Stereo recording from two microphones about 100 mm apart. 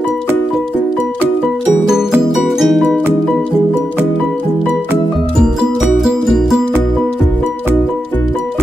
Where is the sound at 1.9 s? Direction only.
5° right (ahead or behind).